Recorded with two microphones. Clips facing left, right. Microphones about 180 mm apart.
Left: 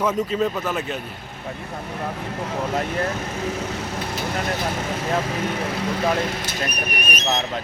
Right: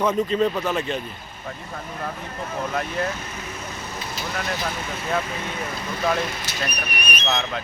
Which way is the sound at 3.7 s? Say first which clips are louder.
Left 5 dB; 75° left (ahead or behind).